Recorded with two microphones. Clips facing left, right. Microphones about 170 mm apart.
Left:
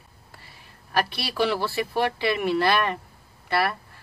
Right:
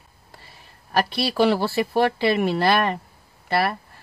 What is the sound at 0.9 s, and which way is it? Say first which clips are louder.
Speech: right 4 dB; 40° right (ahead or behind).